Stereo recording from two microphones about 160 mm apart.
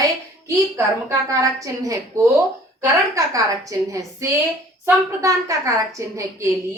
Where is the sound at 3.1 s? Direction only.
20° right (ahead or behind).